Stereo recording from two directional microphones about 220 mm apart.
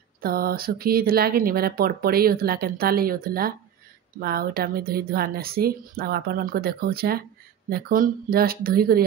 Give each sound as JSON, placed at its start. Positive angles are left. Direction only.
{"t": 0.2, "sound": "speech", "side_deg": -45}